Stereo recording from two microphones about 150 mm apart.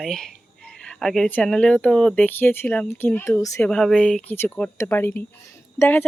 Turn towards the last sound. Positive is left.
turn(degrees=10)  # may be behind; listen again after turning